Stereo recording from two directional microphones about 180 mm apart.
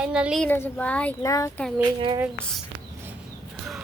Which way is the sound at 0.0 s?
5° right (ahead or behind).